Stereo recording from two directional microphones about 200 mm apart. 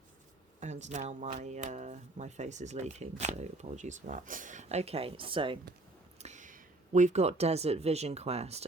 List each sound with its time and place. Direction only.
0.6 s speech: 35° right (ahead or behind)
6.1 s speech: 35° right (ahead or behind)